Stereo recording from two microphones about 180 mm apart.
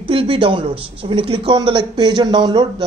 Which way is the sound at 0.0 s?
30° right (ahead or behind).